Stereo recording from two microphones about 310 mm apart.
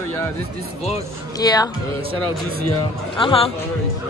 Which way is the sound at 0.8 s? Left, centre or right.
Centre.